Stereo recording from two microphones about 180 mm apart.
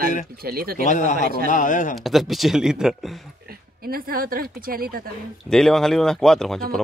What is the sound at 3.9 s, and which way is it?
Speech, 55° right (ahead or behind).